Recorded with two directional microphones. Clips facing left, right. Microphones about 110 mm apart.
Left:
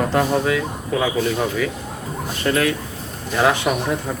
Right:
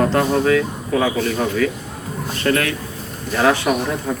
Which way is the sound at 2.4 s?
15° left (ahead or behind).